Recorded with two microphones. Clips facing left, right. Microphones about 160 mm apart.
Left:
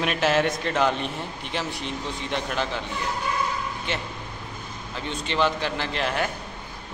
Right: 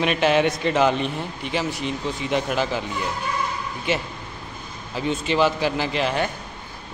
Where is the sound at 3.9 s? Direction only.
10° right (ahead or behind).